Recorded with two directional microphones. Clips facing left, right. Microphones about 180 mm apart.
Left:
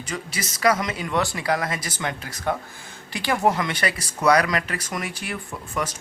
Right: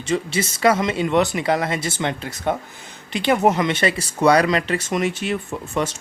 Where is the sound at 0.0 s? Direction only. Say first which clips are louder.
Right 9 dB; 25° right (ahead or behind).